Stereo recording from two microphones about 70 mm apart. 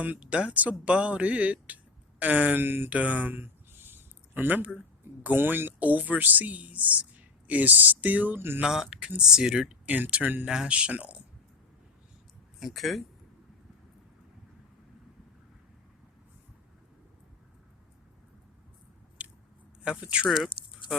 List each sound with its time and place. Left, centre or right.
0.0 s speech: centre
2.9 s a sound: right
5.2 s speech: right
8.6 s speech: centre
9.9 s speech: right
12.5 s speech: centre
19.2 s biting: centre
19.8 s speech: centre